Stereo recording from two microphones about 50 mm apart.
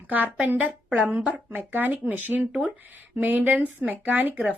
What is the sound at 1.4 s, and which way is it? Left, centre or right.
A woman's voice, right.